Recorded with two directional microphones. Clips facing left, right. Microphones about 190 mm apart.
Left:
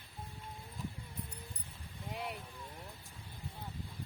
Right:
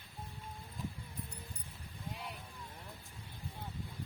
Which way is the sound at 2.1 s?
70° left (ahead or behind).